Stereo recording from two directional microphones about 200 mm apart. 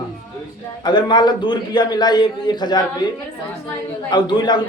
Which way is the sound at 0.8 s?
20° left (ahead or behind).